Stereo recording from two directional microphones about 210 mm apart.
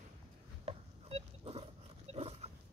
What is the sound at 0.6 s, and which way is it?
Dog, 30° right (ahead or behind).